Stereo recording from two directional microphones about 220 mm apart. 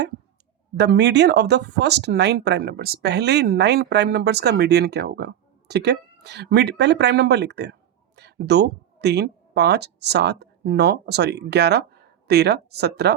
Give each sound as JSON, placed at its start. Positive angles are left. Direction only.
{"t": 0.8, "sound": "speech", "side_deg": -50}